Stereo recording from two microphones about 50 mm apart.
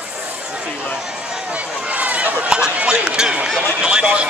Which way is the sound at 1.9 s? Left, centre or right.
Right.